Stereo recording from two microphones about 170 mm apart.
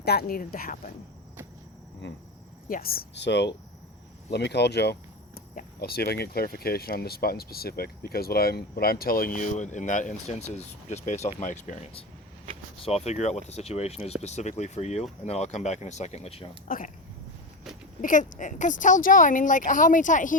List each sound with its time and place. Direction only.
0.0 s speech: 70° left (ahead or behind)
2.0 s speech: 90° left
2.6 s speech: 60° left (ahead or behind)
12.8 s speech: 40° left (ahead or behind)
16.6 s speech: 55° left (ahead or behind)
18.0 s speech: 50° left (ahead or behind)